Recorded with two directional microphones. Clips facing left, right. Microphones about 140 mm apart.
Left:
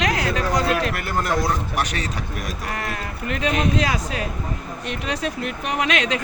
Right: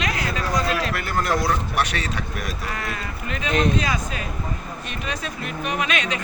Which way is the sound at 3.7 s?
75° left (ahead or behind).